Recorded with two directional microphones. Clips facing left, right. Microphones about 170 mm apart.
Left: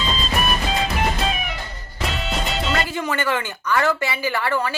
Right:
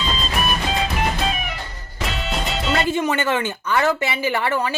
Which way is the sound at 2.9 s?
20° right (ahead or behind).